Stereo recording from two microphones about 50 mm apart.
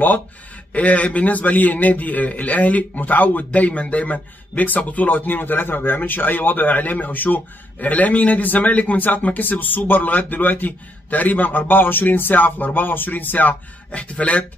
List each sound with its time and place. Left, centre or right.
0.7 s a man's voice: left